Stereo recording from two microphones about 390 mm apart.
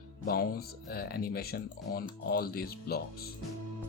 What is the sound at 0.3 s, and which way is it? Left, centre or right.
Speech, left.